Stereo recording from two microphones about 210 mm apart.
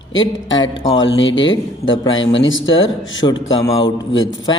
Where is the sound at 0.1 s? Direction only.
65° left (ahead or behind).